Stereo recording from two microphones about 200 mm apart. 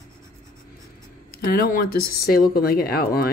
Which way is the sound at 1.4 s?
45° left (ahead or behind).